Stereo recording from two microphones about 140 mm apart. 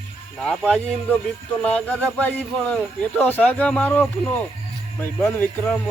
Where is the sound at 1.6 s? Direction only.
10° left (ahead or behind).